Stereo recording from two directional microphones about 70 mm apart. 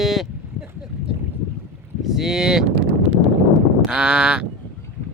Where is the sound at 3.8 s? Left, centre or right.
Centre.